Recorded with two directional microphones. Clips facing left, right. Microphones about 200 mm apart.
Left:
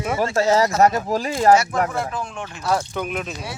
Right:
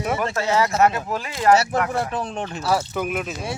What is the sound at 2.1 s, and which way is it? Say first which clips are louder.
Speech: right 3 dB; 35° right (ahead or behind).